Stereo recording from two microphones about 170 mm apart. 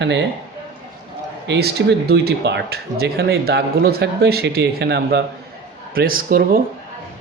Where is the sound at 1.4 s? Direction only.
90° right.